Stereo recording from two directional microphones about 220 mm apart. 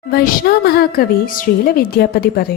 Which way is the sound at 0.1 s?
45° left (ahead or behind).